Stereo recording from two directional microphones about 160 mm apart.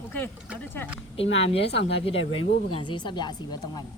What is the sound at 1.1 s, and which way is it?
A woman's voice, 35° left (ahead or behind).